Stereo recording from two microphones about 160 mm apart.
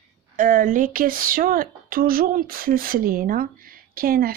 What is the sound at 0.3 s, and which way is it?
Speech, 60° right (ahead or behind).